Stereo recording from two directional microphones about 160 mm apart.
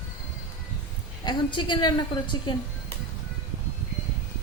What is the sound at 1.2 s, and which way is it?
A woman's voice, 30° left (ahead or behind).